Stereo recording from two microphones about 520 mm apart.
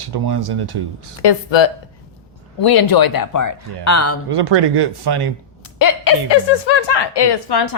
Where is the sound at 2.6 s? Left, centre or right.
Left.